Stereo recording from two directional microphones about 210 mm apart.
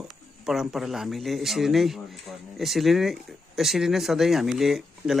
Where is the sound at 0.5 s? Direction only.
Centre (ahead or behind).